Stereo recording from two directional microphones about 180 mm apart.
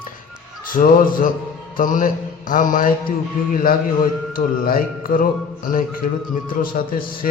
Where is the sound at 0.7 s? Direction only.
50° left (ahead or behind).